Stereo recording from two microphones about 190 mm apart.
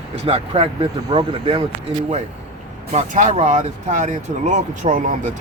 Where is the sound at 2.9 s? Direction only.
40° right (ahead or behind).